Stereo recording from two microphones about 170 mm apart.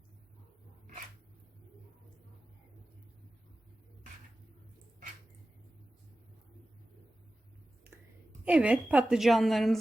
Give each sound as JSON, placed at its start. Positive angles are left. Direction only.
{"t": 8.4, "sound": "a woman's voice", "side_deg": -5}